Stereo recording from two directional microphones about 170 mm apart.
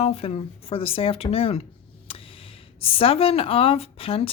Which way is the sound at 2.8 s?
30° left (ahead or behind).